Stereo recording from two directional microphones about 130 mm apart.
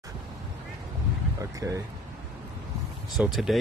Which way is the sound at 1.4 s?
25° right (ahead or behind).